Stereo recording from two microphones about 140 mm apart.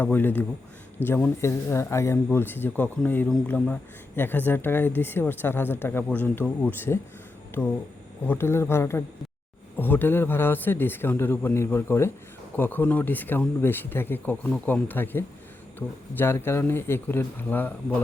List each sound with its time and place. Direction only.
0.0 s speech: 15° left (ahead or behind)